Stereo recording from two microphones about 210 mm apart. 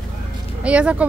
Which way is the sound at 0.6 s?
5° right (ahead or behind).